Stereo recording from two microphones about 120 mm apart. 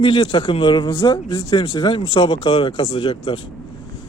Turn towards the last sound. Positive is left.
turn(degrees=45)  # may be behind; listen again after turning